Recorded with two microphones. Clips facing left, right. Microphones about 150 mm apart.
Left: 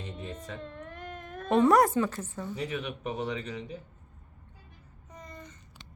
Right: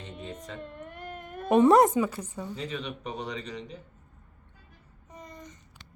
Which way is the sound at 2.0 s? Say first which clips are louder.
Right 1 dB; 10° right (ahead or behind).